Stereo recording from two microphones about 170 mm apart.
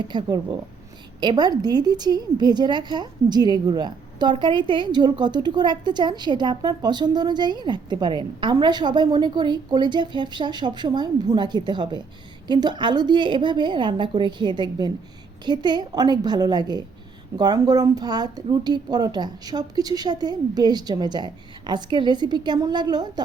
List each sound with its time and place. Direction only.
0.1 s a woman's voice: 25° right (ahead or behind)